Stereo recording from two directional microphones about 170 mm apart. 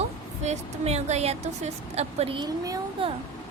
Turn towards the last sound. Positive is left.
turn(degrees=-25)  # may be behind; listen again after turning